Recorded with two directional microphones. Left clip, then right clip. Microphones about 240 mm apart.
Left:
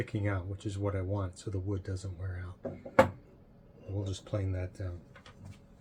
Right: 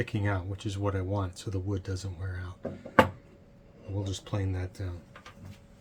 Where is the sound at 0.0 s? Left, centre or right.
Right.